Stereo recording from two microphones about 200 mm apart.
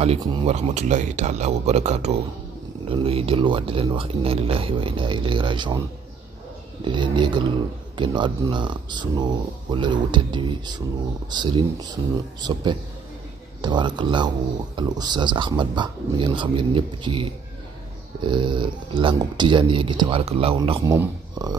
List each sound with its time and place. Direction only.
0.0 s speech: 25° right (ahead or behind)
6.8 s speech: 25° right (ahead or behind)